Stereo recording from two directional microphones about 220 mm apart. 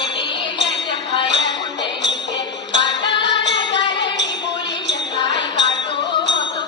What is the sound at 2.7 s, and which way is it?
Music, 20° left (ahead or behind).